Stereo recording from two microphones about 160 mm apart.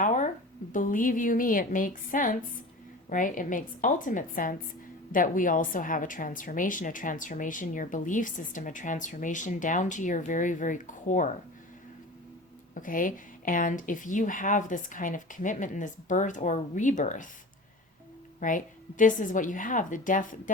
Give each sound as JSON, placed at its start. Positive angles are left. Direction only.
{"t": 0.0, "sound": "a sound", "side_deg": 50}
{"t": 0.7, "sound": "a woman's voice", "side_deg": 55}
{"t": 12.7, "sound": "a woman's voice", "side_deg": 55}
{"t": 18.3, "sound": "a woman's voice", "side_deg": 55}